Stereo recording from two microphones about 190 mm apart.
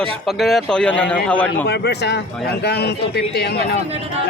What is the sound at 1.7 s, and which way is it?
Speech, 60° left (ahead or behind).